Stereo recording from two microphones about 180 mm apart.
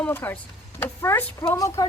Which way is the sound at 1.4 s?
25° left (ahead or behind).